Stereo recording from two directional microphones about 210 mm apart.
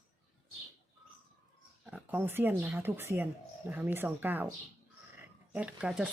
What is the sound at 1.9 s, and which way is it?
Speech, 10° right (ahead or behind).